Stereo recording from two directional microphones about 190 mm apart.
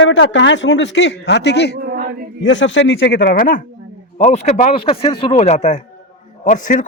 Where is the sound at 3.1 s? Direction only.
55° left (ahead or behind).